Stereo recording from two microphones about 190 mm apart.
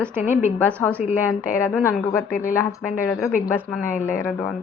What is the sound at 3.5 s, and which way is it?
Speech, 10° left (ahead or behind).